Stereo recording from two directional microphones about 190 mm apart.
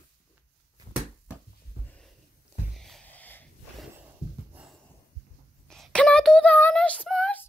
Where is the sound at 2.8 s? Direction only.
5° left (ahead or behind).